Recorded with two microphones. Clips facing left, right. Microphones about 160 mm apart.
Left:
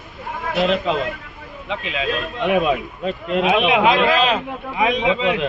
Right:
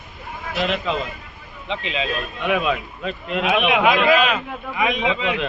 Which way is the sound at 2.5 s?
35° left (ahead or behind).